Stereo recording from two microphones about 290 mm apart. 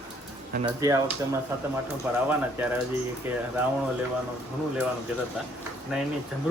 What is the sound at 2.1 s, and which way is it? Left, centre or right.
Speech, centre.